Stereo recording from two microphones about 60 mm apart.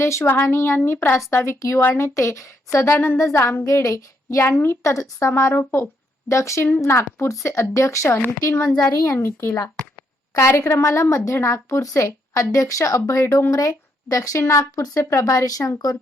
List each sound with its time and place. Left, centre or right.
0.0 s a woman's voice: left
1.8 s a woman's voice: left
2.1 s a woman's voice: left
2.9 s a woman's voice: left
3.2 s a woman's voice: left
3.7 s child singing: left
4.4 s a woman's voice: left
4.8 s a woman's voice: left
6.2 s a woman's voice: left
8.3 s a woman's voice: left
10.6 s a woman's voice: left
13.5 s a woman's voice: left
15.1 s child singing: left